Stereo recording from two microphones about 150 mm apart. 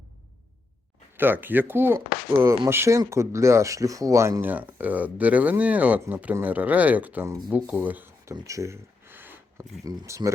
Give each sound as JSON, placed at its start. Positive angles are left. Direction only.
{"t": 1.1, "sound": "speech", "side_deg": -15}
{"t": 7.9, "sound": "a sound", "side_deg": -15}
{"t": 9.8, "sound": "speech", "side_deg": -25}